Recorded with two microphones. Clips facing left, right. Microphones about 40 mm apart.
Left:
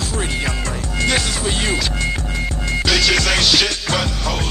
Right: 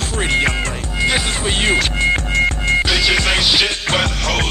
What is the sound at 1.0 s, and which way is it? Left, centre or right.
Music, centre.